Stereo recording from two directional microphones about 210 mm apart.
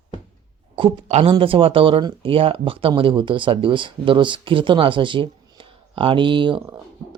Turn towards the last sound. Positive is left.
turn(degrees=-25)  # may be behind; listen again after turning